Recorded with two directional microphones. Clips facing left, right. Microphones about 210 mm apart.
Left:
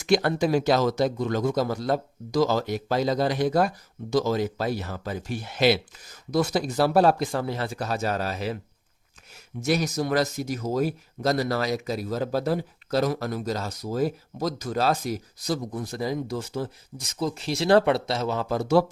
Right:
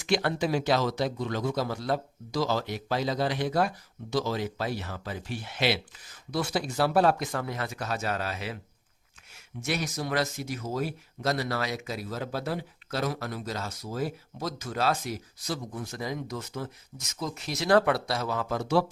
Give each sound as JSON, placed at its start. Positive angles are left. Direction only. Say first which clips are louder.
{"t": 0.0, "sound": "speech", "louder": "left 5 dB", "side_deg": 45}